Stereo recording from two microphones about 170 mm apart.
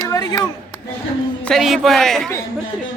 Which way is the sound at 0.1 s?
20° left (ahead or behind).